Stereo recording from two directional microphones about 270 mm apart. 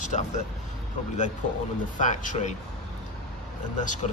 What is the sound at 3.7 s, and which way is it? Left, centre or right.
Speech, left.